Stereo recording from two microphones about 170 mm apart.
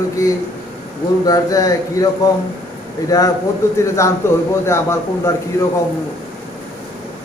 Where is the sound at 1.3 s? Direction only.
20° left (ahead or behind).